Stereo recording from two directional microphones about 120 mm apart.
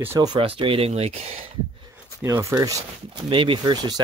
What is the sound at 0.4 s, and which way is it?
Speech, 50° right (ahead or behind).